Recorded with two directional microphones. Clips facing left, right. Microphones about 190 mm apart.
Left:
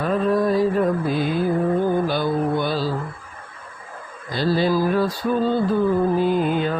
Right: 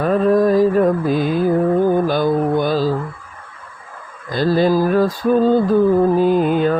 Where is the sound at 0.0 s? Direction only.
45° right (ahead or behind).